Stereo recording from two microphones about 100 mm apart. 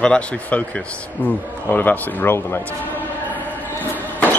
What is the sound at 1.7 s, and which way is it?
Speech, 20° left (ahead or behind).